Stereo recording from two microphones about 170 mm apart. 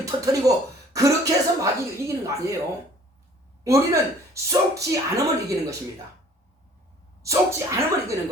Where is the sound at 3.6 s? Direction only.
15° right (ahead or behind).